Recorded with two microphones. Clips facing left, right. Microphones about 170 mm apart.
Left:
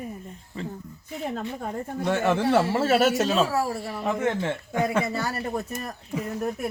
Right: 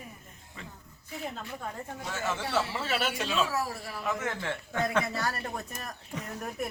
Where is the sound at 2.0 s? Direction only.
60° left (ahead or behind); by 6.6 s 10° left (ahead or behind).